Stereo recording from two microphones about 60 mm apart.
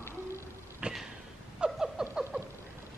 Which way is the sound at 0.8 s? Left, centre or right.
Centre.